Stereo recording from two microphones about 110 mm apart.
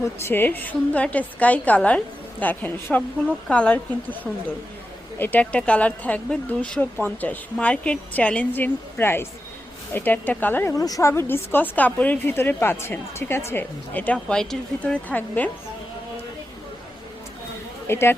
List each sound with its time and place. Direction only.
0.0 s a woman's voice: 20° left (ahead or behind)
10.8 s speech: 30° left (ahead or behind); by 15.4 s 15° left (ahead or behind)
17.8 s speech: 20° left (ahead or behind)